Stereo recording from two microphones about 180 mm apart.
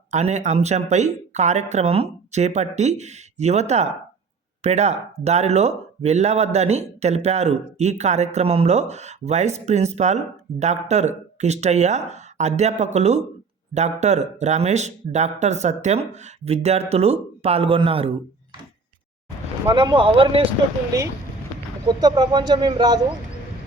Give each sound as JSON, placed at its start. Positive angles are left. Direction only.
{"t": 0.1, "sound": "speech", "side_deg": -40}
{"t": 19.7, "sound": "speech", "side_deg": -25}
{"t": 21.8, "sound": "speech", "side_deg": -20}